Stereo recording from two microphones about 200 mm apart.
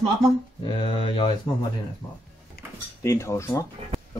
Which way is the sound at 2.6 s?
50° left (ahead or behind).